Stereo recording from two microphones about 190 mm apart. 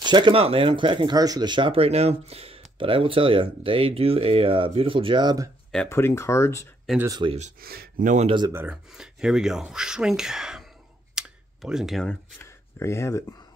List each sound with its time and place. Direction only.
0.0 s speech: 25° right (ahead or behind)
5.9 s speech: 15° left (ahead or behind)
7.1 s speech: 25° right (ahead or behind)
7.6 s speech: 55° right (ahead or behind)
8.3 s speech: 25° right (ahead or behind)
8.5 s speech: 5° right (ahead or behind)
11.1 s a sound: 5° right (ahead or behind); by 13.2 s 15° left (ahead or behind)